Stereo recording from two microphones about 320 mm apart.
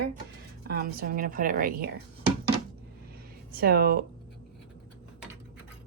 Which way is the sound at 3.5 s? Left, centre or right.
Right.